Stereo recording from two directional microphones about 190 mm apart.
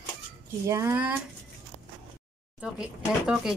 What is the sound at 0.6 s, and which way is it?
Speech, 15° right (ahead or behind).